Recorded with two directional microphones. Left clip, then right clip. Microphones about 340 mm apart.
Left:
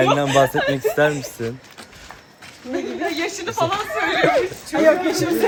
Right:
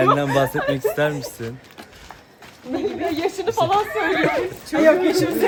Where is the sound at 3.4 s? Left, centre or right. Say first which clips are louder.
Right 1 dB; right.